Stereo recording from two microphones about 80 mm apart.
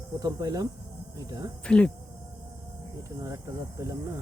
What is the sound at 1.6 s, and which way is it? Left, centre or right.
Speech, centre.